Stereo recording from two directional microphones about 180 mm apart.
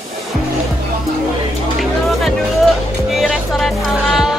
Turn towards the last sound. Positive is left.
turn(degrees=0)  # may be behind; listen again after turning